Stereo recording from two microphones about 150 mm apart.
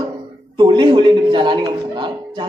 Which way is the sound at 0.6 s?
35° right (ahead or behind).